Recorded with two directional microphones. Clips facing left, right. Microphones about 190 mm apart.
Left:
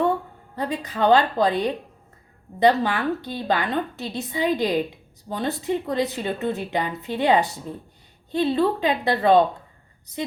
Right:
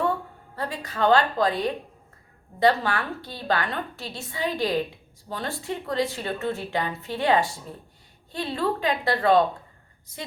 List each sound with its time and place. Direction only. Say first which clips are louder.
0.5 s a woman's voice: left 4 dB; 20° left (ahead or behind)